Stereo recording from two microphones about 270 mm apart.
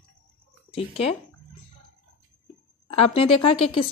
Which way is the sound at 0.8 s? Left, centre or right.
Left.